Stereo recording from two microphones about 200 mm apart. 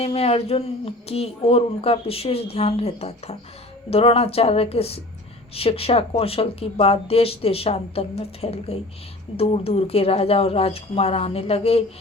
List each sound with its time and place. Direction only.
0.0 s speech: 30° left (ahead or behind)